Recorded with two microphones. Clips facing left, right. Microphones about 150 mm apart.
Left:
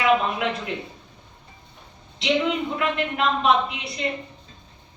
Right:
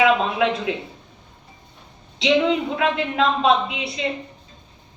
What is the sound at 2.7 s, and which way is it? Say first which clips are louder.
A woman's voice: right 4 dB; 90° right.